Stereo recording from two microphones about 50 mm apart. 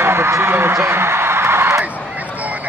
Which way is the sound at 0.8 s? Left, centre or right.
Right.